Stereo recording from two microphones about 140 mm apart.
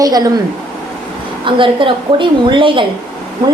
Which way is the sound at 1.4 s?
35° right (ahead or behind).